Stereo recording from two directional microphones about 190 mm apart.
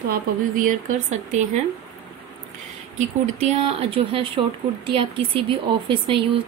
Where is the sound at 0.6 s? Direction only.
45° right (ahead or behind).